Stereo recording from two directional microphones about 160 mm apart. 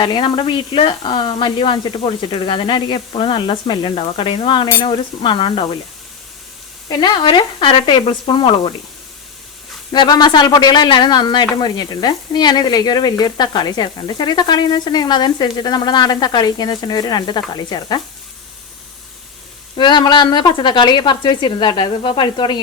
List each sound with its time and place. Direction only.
0.0 s speech: 30° left (ahead or behind)
6.8 s speech: 30° left (ahead or behind)
9.9 s frying: 30° left (ahead or behind)
19.7 s frying: 30° left (ahead or behind)